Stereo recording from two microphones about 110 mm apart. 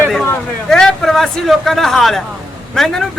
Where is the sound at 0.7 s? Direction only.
5° left (ahead or behind).